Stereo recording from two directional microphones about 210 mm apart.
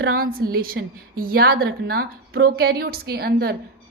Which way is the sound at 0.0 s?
45° right (ahead or behind).